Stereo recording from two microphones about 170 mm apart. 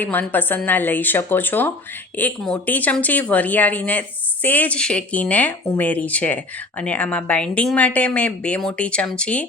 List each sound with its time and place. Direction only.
0.0 s speech: 10° left (ahead or behind)